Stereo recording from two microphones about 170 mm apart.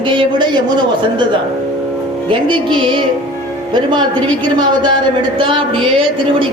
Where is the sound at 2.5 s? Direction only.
30° right (ahead or behind).